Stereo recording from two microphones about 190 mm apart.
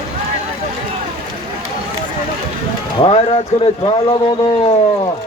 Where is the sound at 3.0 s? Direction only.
30° left (ahead or behind).